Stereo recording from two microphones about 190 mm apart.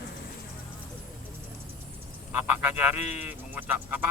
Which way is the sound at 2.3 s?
10° right (ahead or behind).